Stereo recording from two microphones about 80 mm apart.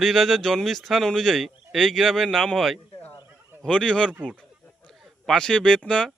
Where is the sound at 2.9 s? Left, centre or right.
Left.